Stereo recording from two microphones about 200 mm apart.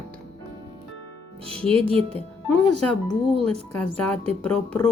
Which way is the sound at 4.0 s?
5° left (ahead or behind).